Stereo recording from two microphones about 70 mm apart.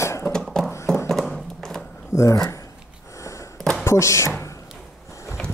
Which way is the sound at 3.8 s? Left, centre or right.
Left.